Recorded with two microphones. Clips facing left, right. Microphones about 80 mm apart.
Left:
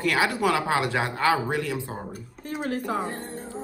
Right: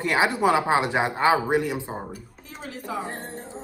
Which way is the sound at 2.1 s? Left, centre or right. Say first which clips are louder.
Left 7 dB; left.